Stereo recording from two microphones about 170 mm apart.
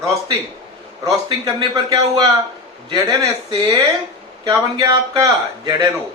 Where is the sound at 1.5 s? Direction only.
20° right (ahead or behind).